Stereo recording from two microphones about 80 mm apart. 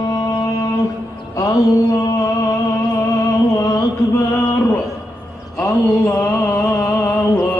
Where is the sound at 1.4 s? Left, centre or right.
Left.